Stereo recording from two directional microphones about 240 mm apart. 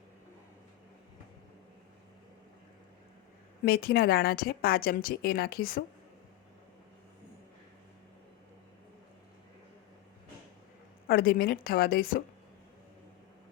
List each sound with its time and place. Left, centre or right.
3.7 s a woman's voice: left
11.1 s a woman's voice: left